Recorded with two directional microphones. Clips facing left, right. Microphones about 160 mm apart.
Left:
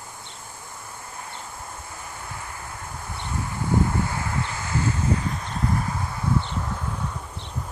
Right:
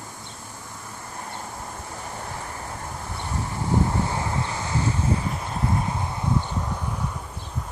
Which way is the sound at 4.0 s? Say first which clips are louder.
Right 1 dB; 25° right (ahead or behind).